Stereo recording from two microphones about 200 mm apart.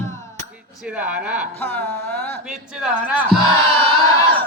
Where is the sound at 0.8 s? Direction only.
5° right (ahead or behind).